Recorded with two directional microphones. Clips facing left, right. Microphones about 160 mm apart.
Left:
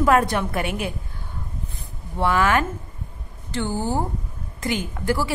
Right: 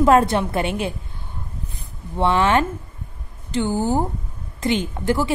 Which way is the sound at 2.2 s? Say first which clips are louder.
Right 2 dB; 25° right (ahead or behind).